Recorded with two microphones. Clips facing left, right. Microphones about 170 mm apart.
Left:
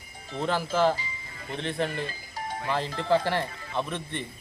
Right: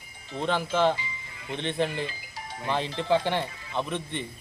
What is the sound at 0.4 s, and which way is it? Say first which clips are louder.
Speech: even; 5° left (ahead or behind).